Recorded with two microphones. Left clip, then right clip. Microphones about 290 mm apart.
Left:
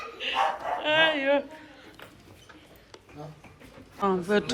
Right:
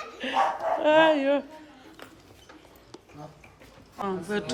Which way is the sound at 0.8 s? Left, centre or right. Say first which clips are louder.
Right 3 dB; centre.